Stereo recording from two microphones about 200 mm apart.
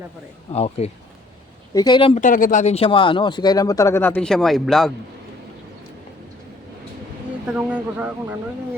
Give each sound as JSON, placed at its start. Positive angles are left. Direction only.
{"t": 0.5, "sound": "speech", "side_deg": 30}
{"t": 1.7, "sound": "speech", "side_deg": 20}
{"t": 2.2, "sound": "speech", "side_deg": 40}
{"t": 7.5, "sound": "speech", "side_deg": -5}